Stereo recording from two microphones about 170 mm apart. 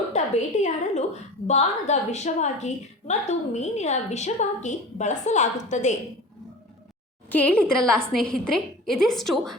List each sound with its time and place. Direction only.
0.1 s a woman's voice: 45° left (ahead or behind)
7.3 s a woman's voice: 10° left (ahead or behind)